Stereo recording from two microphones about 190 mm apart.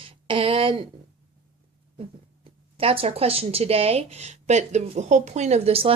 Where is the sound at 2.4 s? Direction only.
30° right (ahead or behind).